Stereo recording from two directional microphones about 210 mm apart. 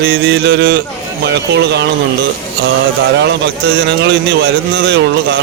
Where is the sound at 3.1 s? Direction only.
55° right (ahead or behind).